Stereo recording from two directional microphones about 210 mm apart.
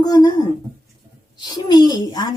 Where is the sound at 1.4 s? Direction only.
20° left (ahead or behind).